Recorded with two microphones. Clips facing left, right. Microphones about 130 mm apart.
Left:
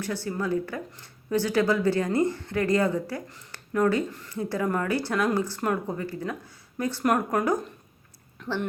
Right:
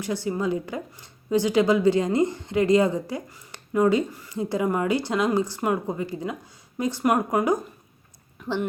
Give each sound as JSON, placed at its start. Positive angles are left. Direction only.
{"t": 0.0, "sound": "a woman's voice", "side_deg": -15}